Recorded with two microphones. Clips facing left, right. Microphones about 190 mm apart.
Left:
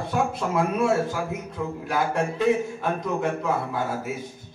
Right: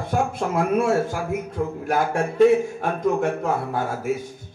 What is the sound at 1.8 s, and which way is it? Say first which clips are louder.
Music: right 1 dB; 50° right (ahead or behind).